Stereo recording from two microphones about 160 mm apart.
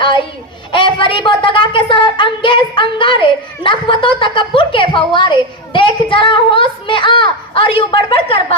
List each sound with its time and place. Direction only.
0.7 s a woman's voice: 30° left (ahead or behind)